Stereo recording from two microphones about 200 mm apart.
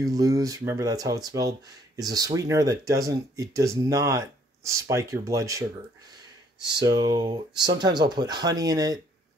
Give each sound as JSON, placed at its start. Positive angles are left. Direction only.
{"t": 0.0, "sound": "speech", "side_deg": -15}